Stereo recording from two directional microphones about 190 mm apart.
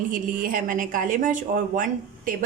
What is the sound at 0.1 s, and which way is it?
A woman's voice, 45° right (ahead or behind).